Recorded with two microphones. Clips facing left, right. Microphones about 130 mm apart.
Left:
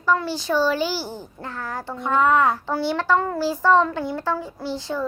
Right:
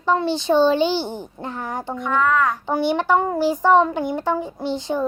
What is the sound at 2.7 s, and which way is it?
A child's voice, 20° right (ahead or behind).